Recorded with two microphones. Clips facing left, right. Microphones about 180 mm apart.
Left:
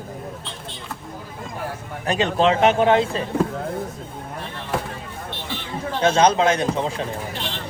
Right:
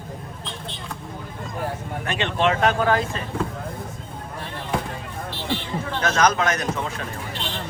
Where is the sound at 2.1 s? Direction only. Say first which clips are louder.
Left 4 dB; 35° left (ahead or behind).